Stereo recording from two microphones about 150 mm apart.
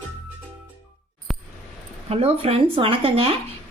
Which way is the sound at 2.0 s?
40° right (ahead or behind).